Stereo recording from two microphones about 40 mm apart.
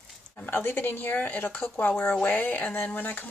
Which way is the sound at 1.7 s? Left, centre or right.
Left.